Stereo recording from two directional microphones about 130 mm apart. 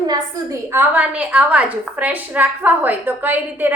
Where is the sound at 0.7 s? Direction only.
15° right (ahead or behind).